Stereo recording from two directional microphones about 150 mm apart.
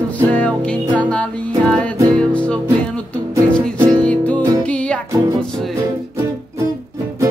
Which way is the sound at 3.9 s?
10° left (ahead or behind).